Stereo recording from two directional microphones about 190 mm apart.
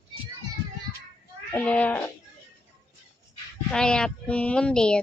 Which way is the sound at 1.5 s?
5° left (ahead or behind).